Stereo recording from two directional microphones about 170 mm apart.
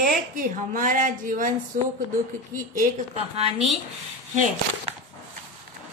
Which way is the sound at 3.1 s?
35° right (ahead or behind).